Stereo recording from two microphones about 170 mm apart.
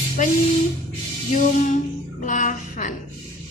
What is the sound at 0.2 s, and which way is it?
A woman's voice, 45° left (ahead or behind).